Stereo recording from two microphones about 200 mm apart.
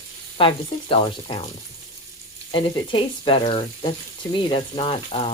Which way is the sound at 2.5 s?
25° left (ahead or behind).